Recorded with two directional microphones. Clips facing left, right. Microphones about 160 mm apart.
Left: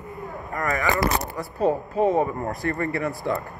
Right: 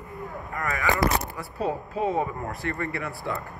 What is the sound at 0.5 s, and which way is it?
Speech, 40° left (ahead or behind).